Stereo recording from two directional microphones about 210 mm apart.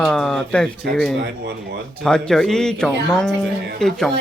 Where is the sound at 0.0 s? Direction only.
Centre (ahead or behind).